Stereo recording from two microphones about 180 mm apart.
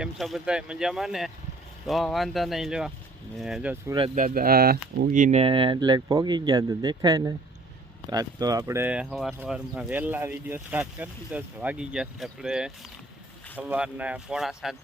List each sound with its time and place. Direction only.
0.0 s speech: centre (ahead or behind)
4.1 s speech: 50° right (ahead or behind); by 14.8 s centre (ahead or behind)